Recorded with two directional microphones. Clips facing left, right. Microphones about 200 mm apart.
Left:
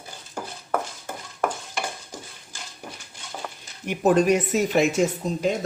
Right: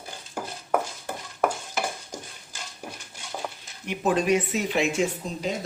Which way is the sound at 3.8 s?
45° left (ahead or behind).